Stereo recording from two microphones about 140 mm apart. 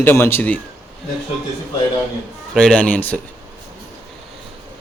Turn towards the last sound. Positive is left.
turn(degrees=10)  # may be behind; listen again after turning